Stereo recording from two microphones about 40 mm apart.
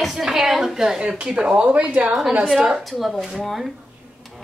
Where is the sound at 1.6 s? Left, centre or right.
Right.